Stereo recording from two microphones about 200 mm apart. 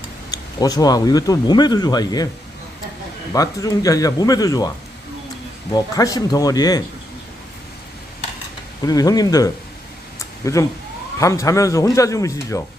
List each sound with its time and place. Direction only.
0.3 s speech: 20° left (ahead or behind)
3.3 s speech: 15° left (ahead or behind)
5.7 s speech: 20° left (ahead or behind)
8.9 s speech: 20° left (ahead or behind)